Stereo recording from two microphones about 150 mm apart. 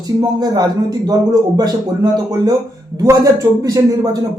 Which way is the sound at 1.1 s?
25° right (ahead or behind).